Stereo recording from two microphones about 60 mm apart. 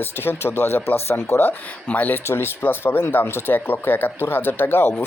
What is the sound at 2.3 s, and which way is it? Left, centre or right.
Speech, left.